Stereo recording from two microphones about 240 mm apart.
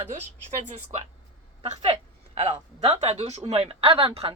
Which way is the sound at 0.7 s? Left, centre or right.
Right.